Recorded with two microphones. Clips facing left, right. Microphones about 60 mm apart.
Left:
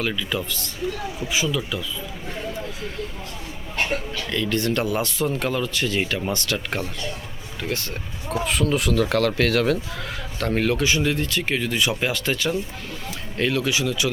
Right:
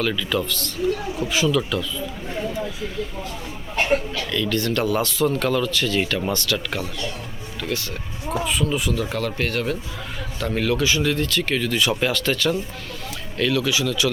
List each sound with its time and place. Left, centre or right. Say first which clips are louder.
0.1 s speech: right 3 dB; centre
1.3 s speech: right 4 dB; centre
4.3 s speech: even; left
6.3 s speech: right 1 dB; left
8.4 s speech: left 3 dB; left
10.4 s speech: even; left